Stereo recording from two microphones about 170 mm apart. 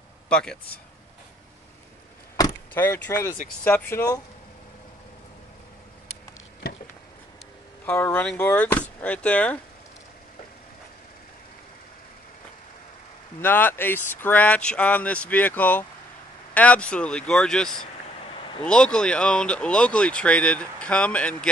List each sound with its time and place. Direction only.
0.3 s a man's voice: 5° left (ahead or behind)
2.4 s a sound: 20° left (ahead or behind)
2.7 s speech: 15° left (ahead or behind)
7.8 s speech: 10° left (ahead or behind)
13.4 s speech: 10° left (ahead or behind)